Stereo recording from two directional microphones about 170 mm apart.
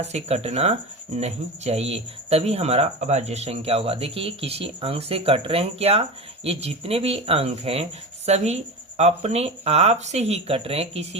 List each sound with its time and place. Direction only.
0.0 s speech: 40° right (ahead or behind)